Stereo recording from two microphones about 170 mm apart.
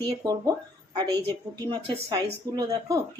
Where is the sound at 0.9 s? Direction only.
25° right (ahead or behind).